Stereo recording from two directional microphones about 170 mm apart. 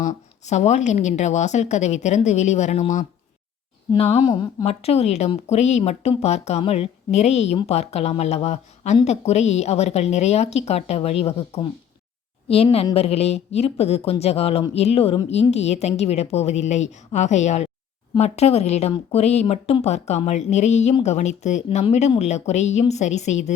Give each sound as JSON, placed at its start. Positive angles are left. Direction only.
{"t": 0.0, "sound": "a woman's voice", "side_deg": 45}
{"t": 12.7, "sound": "a woman's voice", "side_deg": 35}